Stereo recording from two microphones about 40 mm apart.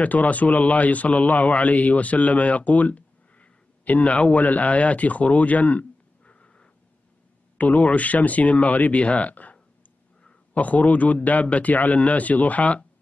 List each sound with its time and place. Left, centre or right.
0.0 s a man's voice: left
7.5 s a man's voice: left